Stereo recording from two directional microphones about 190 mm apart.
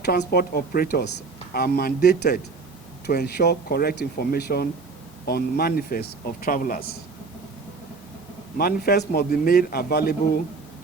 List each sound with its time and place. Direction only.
0.0 s a man's voice: 55° left (ahead or behind)
8.5 s a man's voice: 55° left (ahead or behind)